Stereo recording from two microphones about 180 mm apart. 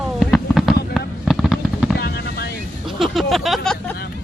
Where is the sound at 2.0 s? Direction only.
60° left (ahead or behind).